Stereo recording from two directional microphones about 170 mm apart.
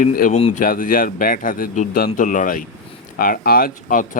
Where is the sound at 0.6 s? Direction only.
55° left (ahead or behind).